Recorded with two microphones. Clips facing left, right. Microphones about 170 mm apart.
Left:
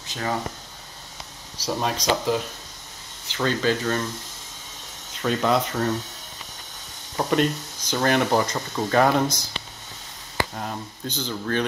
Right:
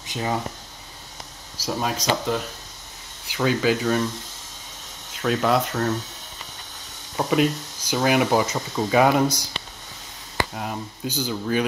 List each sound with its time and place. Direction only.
0.0 s a sound: 15° right (ahead or behind)
1.7 s speech: centre (ahead or behind)
5.1 s speech: centre (ahead or behind)
7.2 s speech: 5° right (ahead or behind)
10.5 s speech: 5° right (ahead or behind)